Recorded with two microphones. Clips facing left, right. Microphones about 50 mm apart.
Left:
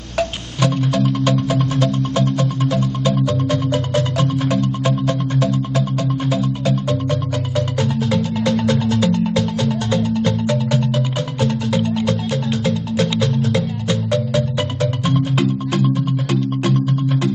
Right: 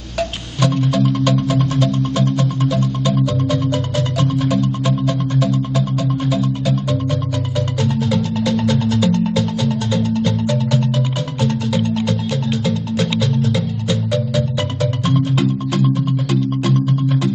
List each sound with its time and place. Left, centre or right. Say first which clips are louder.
0.2 s music: even; centre
2.7 s music: even; left
6.9 s music: even; centre
9.3 s music: even; left
10.0 s music: even; centre
12.6 s music: even; left